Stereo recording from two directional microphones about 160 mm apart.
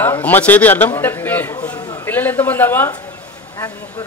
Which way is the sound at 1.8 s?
25° left (ahead or behind).